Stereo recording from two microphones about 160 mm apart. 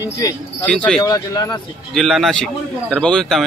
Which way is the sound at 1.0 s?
25° left (ahead or behind).